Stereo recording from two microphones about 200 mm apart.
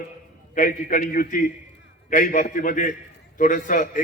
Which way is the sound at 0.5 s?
40° left (ahead or behind).